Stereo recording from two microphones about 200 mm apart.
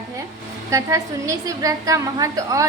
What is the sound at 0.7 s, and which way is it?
A woman's voice, 15° right (ahead or behind).